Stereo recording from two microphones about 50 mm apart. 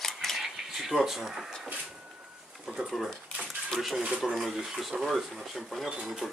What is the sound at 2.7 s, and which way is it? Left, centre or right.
Speech, centre.